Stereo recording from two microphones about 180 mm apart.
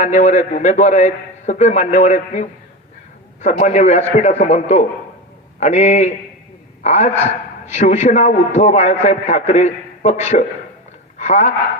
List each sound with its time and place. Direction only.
0.0 s a man's voice: 40° left (ahead or behind)